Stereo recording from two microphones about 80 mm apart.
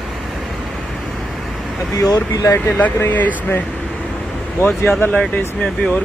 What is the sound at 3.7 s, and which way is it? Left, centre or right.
Vehicle, centre.